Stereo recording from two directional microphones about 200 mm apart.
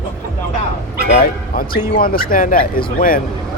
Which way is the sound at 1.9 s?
45° left (ahead or behind).